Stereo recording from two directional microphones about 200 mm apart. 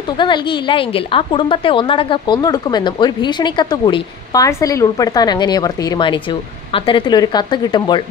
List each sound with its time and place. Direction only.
0.2 s a woman's voice: 25° left (ahead or behind)